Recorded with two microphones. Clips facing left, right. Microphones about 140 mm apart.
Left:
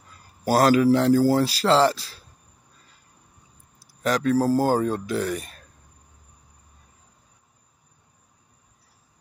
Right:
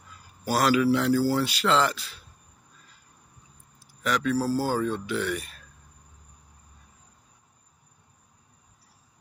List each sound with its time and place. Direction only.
0.1 s speech: 40° left (ahead or behind)
3.8 s a man's voice: 35° left (ahead or behind)